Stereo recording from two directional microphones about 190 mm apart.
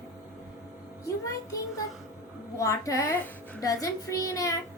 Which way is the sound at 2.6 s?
15° left (ahead or behind).